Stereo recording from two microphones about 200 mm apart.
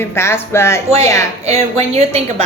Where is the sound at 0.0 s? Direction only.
10° left (ahead or behind).